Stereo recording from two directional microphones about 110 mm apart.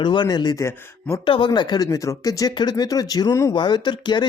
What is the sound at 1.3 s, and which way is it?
Speech, 45° left (ahead or behind).